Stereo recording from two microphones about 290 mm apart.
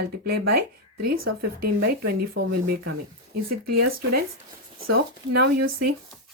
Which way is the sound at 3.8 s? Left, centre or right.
Right.